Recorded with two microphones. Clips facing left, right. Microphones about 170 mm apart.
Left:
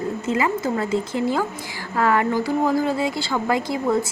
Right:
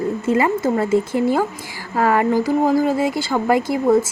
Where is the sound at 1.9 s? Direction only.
35° right (ahead or behind).